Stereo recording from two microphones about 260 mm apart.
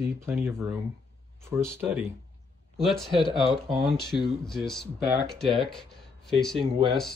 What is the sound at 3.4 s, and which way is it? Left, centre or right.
Speech, right.